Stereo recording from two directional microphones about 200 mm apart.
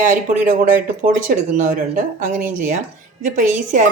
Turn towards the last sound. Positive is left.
turn(degrees=-40)  # may be behind; listen again after turning